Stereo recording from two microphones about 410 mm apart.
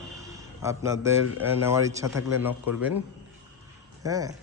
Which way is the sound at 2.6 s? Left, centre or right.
Left.